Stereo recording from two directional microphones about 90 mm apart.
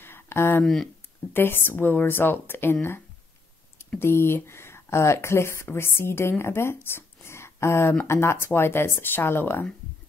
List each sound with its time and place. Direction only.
0.0 s a sound: 25° left (ahead or behind)
1.3 s speech: 25° left (ahead or behind)
4.0 s speech: 25° left (ahead or behind)